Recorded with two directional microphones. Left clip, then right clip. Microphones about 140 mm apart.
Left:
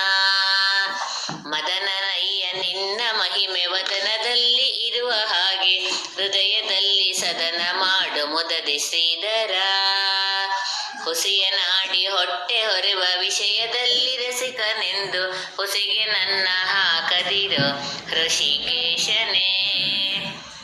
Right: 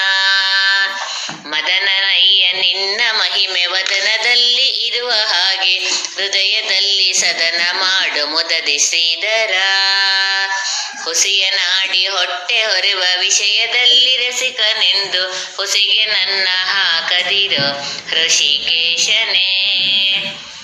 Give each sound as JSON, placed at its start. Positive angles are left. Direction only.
{"t": 0.0, "sound": "fire alarm", "side_deg": 0}
{"t": 1.7, "sound": "music", "side_deg": -15}
{"t": 11.2, "sound": "speech", "side_deg": -15}
{"t": 15.7, "sound": "music", "side_deg": -25}